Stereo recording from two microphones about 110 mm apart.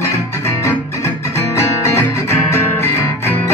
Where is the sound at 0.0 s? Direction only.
25° left (ahead or behind).